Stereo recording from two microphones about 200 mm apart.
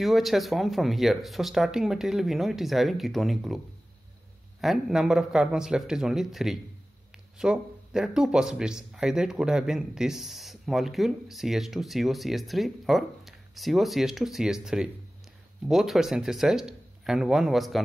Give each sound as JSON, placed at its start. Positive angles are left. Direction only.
{"t": 0.0, "sound": "speech", "side_deg": 0}
{"t": 4.6, "sound": "speech", "side_deg": 0}